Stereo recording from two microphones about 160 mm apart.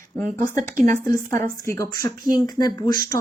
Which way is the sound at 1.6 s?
20° left (ahead or behind).